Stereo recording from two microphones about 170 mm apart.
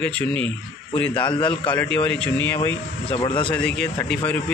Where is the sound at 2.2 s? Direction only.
10° left (ahead or behind).